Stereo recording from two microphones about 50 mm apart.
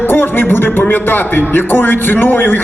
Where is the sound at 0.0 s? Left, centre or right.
Left.